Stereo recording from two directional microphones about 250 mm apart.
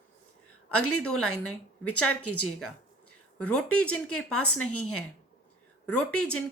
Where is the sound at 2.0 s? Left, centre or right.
Left.